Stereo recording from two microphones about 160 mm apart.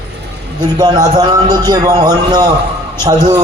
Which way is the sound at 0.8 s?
25° right (ahead or behind).